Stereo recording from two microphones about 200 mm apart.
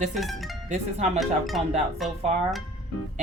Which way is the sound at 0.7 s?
35° right (ahead or behind).